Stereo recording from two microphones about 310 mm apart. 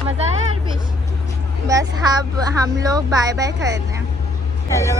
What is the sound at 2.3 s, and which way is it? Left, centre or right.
Speech, centre.